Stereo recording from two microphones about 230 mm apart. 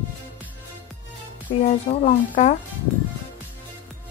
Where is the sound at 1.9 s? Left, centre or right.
Left.